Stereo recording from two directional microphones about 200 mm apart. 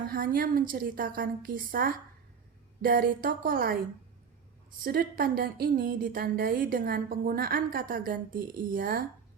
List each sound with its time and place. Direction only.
0.1 s a woman's voice: 45° right (ahead or behind)
4.8 s a woman's voice: 50° right (ahead or behind)